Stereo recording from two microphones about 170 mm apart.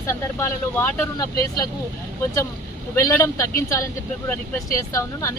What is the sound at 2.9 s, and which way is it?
Speech, 15° left (ahead or behind).